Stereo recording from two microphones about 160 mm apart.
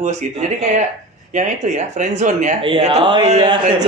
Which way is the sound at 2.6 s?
35° right (ahead or behind).